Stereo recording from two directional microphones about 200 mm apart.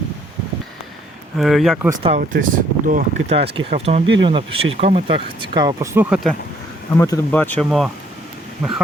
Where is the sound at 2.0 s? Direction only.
35° right (ahead or behind).